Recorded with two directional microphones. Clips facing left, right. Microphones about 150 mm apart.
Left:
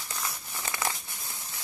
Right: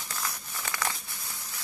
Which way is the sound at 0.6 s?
25° left (ahead or behind).